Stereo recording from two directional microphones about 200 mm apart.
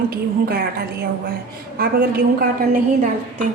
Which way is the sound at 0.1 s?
50° right (ahead or behind).